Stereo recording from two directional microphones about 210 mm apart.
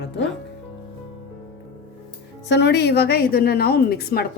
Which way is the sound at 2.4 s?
55° left (ahead or behind).